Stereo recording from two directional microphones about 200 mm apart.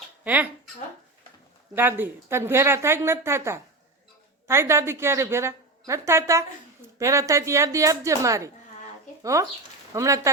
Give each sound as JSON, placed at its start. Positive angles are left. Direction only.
{"t": 1.7, "sound": "a woman's voice", "side_deg": -10}